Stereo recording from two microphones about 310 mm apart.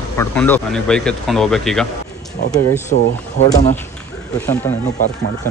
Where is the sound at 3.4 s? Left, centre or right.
Left.